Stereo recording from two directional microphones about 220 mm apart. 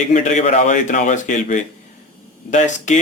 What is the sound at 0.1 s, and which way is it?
Speech, 35° left (ahead or behind).